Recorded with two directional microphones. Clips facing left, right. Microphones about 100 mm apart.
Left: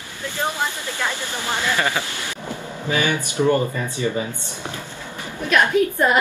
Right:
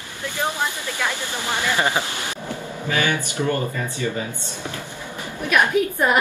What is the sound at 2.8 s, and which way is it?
Speech, 20° left (ahead or behind).